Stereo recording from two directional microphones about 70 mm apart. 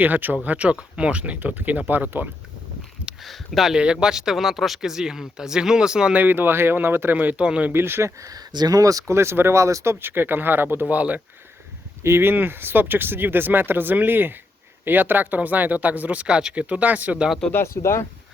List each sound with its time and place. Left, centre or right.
0.0 s speech: right
3.2 s speech: centre
3.8 s speech: centre
6.1 s speech: right
7.4 s speech: centre
7.7 s speech: right
8.2 s speech: right
12.0 s speech: right
17.5 s speech: left